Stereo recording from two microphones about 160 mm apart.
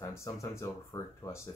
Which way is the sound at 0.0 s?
20° left (ahead or behind).